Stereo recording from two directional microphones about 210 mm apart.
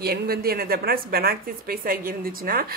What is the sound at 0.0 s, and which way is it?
A woman's voice, 50° right (ahead or behind).